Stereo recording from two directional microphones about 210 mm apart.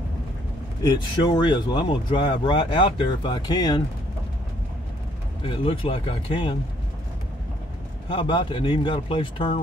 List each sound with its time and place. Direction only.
0.8 s speech: 20° left (ahead or behind)
5.4 s speech: 25° left (ahead or behind)
8.1 s speech: 25° left (ahead or behind)